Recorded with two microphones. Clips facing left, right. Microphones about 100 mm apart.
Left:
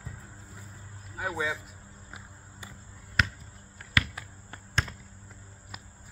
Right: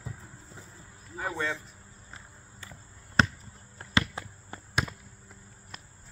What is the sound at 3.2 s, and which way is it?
Basketball bounce, 30° right (ahead or behind).